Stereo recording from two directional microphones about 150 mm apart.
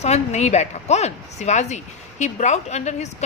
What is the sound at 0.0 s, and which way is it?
Speech, 45° left (ahead or behind).